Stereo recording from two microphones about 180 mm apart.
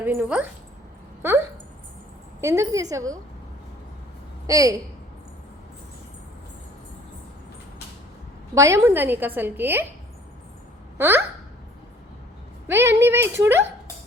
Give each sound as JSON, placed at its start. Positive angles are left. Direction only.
{"t": 0.0, "sound": "a woman's voice", "side_deg": -10}
{"t": 2.4, "sound": "a woman's voice", "side_deg": -15}
{"t": 4.4, "sound": "a woman's voice", "side_deg": -20}
{"t": 8.5, "sound": "a woman's voice", "side_deg": -15}
{"t": 10.9, "sound": "speech", "side_deg": -10}
{"t": 12.6, "sound": "a woman's voice", "side_deg": -15}